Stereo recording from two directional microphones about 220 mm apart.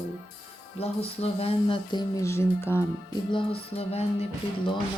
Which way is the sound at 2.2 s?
10° left (ahead or behind).